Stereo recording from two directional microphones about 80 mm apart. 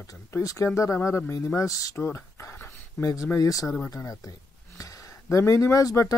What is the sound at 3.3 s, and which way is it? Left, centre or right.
Speech, left.